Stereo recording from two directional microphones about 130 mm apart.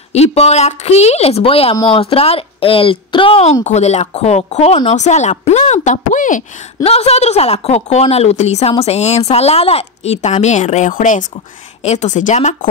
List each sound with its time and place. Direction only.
0.1 s a woman's voice: 55° left (ahead or behind)
3.6 s a woman's voice: 60° left (ahead or behind); by 6.4 s 80° left
6.8 s a woman's voice: 50° left (ahead or behind); by 11.2 s 85° left
11.8 s a woman's voice: 60° left (ahead or behind)